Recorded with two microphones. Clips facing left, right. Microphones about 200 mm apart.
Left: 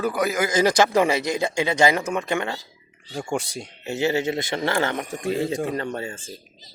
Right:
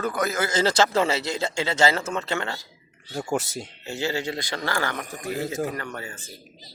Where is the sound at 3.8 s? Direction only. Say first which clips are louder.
Left 6 dB; 20° left (ahead or behind).